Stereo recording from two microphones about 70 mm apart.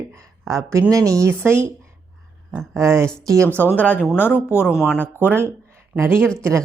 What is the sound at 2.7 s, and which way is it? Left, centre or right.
Speech, right.